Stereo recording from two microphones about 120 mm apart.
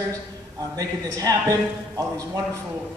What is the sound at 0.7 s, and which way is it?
Speech, 30° right (ahead or behind).